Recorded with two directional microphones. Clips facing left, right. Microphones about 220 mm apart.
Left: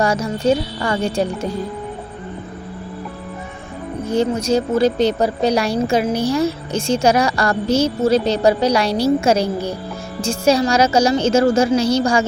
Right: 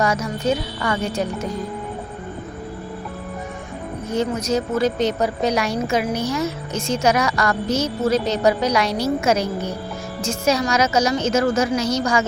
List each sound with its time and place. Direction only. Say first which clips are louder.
0.0 s a woman's voice: left 3 dB; 30° left (ahead or behind)
4.1 s a woman's voice: left 4 dB; 30° left (ahead or behind)